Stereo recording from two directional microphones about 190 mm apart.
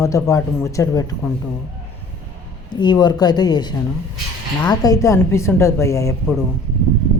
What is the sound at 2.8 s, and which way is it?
Speech, 25° left (ahead or behind).